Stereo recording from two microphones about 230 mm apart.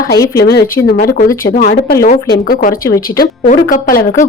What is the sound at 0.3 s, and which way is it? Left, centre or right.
A woman's voice, left.